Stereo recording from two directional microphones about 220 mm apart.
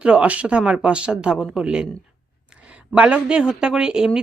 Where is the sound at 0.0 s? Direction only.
5° right (ahead or behind).